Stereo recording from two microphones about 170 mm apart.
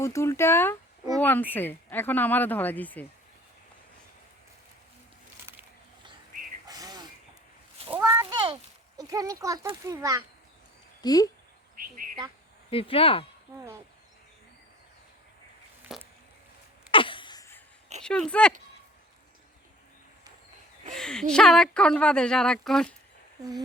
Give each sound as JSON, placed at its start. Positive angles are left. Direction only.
{"t": 0.0, "sound": "speech", "side_deg": 15}
{"t": 6.7, "sound": "a sound", "side_deg": -20}
{"t": 9.0, "sound": "speech", "side_deg": -20}
{"t": 11.0, "sound": "speech", "side_deg": 20}
{"t": 11.8, "sound": "speech", "side_deg": -60}
{"t": 12.7, "sound": "speech", "side_deg": 35}
{"t": 15.9, "sound": "a sound", "side_deg": 0}
{"t": 16.9, "sound": "a sound", "side_deg": 30}
{"t": 18.0, "sound": "a woman's voice", "side_deg": 5}
{"t": 20.9, "sound": "a woman's voice", "side_deg": 5}